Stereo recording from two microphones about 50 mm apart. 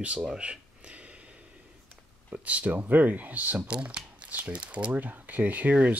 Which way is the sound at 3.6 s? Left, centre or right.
Right.